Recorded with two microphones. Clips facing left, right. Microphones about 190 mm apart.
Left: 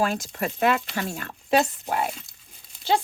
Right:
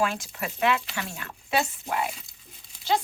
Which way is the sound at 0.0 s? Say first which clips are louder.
Left 3 dB; 40° left (ahead or behind).